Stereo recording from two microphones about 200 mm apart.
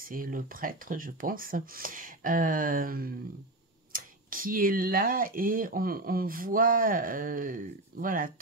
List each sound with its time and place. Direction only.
0.0 s speech: 45° right (ahead or behind)